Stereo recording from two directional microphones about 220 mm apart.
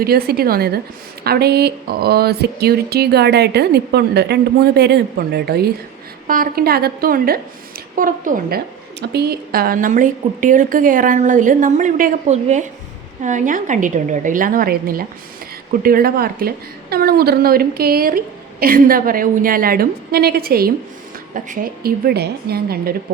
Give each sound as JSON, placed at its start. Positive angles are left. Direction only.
{"t": 0.0, "sound": "a woman's voice", "side_deg": -45}